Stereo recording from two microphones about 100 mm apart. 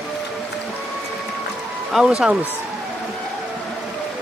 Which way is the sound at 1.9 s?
5° right (ahead or behind).